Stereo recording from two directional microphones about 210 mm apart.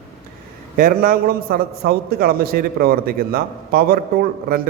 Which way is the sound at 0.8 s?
40° right (ahead or behind).